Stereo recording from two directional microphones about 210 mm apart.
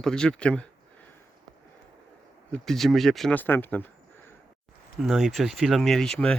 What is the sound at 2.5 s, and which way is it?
Speech, centre (ahead or behind).